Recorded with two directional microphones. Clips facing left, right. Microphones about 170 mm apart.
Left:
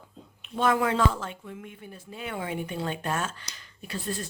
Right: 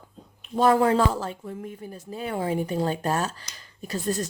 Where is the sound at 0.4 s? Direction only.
35° right (ahead or behind).